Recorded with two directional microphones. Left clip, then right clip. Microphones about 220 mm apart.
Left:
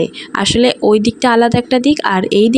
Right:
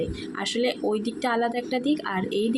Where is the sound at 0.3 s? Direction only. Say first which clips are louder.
Left 14 dB; 45° left (ahead or behind).